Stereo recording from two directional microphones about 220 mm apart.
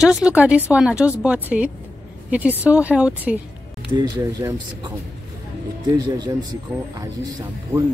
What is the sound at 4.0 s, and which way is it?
Speech, 15° right (ahead or behind).